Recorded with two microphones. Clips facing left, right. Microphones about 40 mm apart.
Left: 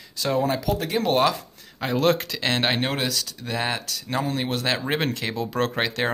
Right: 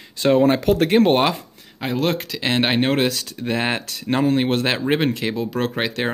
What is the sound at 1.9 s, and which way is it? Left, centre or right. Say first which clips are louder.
Speech: left 1 dB; centre.